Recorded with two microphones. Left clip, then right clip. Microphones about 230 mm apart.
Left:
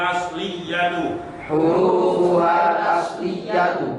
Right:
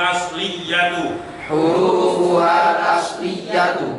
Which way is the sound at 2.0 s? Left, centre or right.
Left.